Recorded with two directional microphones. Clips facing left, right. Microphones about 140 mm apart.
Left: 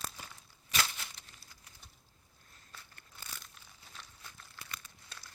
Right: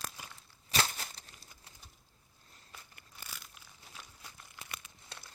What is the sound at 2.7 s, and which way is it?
Crumpling, 10° right (ahead or behind).